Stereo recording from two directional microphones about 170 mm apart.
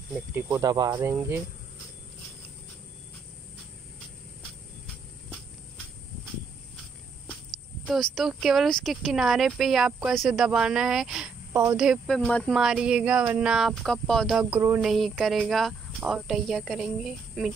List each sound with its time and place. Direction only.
0.1 s speech: 15° right (ahead or behind)
7.8 s speech: centre (ahead or behind)